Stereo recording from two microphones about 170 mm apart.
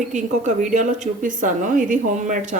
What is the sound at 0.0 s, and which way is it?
A woman's voice, 45° right (ahead or behind).